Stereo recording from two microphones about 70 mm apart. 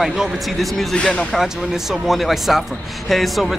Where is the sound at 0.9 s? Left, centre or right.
Centre.